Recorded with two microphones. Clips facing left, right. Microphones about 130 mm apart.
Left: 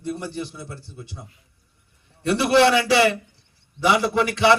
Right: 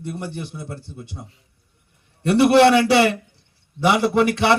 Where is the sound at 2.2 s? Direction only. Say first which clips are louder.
Right 4 dB; 55° right (ahead or behind).